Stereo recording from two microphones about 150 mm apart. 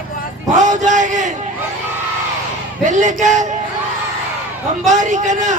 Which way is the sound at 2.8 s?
55° right (ahead or behind).